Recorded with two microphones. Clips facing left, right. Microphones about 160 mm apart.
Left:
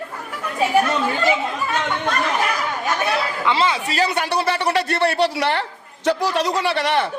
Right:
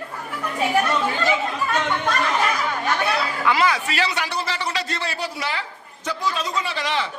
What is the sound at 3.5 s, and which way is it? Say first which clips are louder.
Speech: even; 25° left (ahead or behind).